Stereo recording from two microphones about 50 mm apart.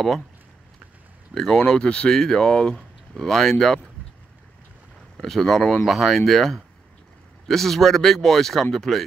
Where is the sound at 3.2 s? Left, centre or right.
Centre.